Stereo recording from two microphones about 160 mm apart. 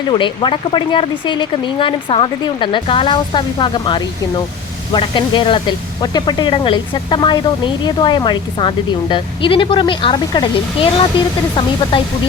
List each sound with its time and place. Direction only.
0.1 s speech: 30° left (ahead or behind)